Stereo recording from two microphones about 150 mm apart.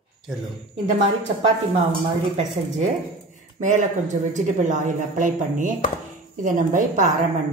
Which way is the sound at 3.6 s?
55° right (ahead or behind).